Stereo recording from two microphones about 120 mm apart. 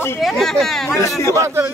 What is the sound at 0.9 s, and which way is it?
Speech, 25° left (ahead or behind).